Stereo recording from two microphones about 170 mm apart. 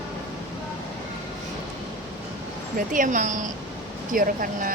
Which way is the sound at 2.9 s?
50° right (ahead or behind).